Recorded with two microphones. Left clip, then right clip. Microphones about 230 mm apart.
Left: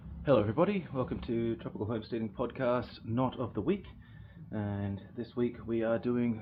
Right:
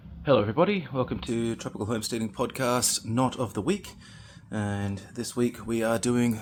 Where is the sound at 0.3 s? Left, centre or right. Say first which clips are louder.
Right 5 dB; right.